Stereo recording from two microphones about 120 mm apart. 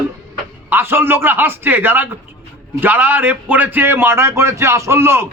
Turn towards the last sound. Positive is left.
turn(degrees=-20)  # may be behind; listen again after turning